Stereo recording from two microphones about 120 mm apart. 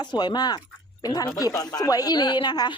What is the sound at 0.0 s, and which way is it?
Speech, 40° left (ahead or behind).